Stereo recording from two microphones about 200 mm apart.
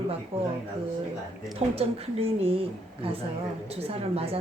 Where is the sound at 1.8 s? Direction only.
30° right (ahead or behind).